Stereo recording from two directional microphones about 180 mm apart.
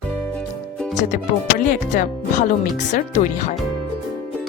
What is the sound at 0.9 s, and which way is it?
Speech, 45° left (ahead or behind).